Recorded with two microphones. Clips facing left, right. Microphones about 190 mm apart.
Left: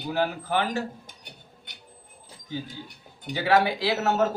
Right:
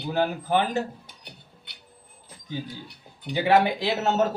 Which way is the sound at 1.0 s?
45° left (ahead or behind).